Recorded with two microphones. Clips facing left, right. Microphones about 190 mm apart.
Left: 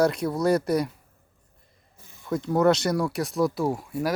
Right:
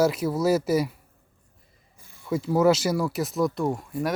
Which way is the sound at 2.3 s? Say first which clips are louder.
Right 1 dB; 5° right (ahead or behind).